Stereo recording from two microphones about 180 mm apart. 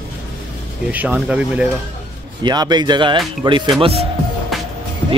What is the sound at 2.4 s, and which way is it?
Speech, 25° right (ahead or behind).